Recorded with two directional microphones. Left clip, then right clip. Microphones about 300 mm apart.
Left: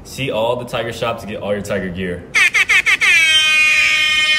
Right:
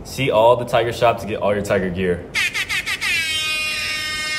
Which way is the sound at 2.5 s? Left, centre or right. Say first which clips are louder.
Left 10 dB; centre.